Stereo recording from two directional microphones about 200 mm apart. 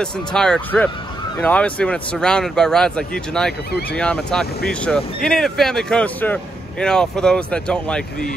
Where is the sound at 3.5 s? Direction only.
55° left (ahead or behind).